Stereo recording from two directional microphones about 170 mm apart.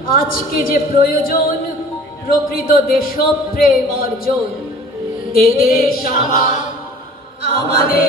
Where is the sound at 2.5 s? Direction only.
60° left (ahead or behind).